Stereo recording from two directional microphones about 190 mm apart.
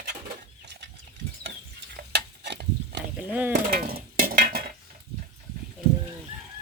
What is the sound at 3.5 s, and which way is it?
Dishes, 50° right (ahead or behind).